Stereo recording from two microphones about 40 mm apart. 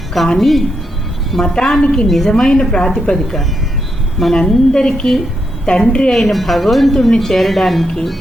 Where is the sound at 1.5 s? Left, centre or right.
Centre.